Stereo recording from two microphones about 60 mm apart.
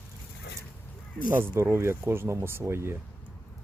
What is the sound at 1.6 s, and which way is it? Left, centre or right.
Speech, right.